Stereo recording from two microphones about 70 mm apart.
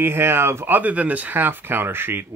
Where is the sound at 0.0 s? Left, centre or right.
Right.